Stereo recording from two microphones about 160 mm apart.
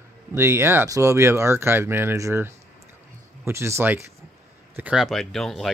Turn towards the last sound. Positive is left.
turn(degrees=0)  # may be behind; listen again after turning